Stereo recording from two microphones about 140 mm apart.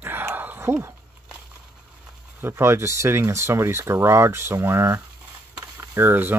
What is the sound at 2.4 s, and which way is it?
Speech, 20° right (ahead or behind).